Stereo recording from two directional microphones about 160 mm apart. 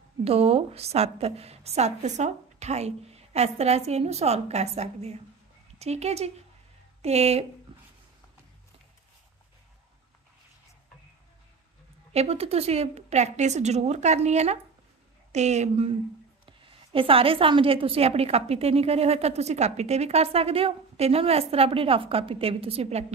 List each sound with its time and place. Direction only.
0.2 s a woman's voice: 40° right (ahead or behind)
7.7 s a sound: 35° right (ahead or behind)
12.1 s a woman's voice: 40° right (ahead or behind)